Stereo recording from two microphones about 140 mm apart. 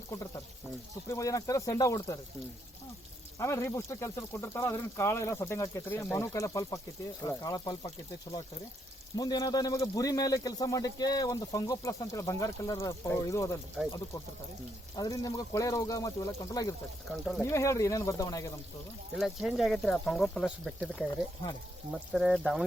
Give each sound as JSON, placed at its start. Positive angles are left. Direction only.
{"t": 0.1, "sound": "speech", "side_deg": 25}
{"t": 3.3, "sound": "speech", "side_deg": 20}
{"t": 9.1, "sound": "speech", "side_deg": 25}
{"t": 14.9, "sound": "speech", "side_deg": 25}
{"t": 17.1, "sound": "speech", "side_deg": 0}
{"t": 17.4, "sound": "speech", "side_deg": 20}
{"t": 19.1, "sound": "speech", "side_deg": 0}